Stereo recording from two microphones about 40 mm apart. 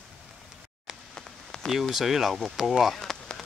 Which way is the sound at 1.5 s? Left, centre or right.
Centre.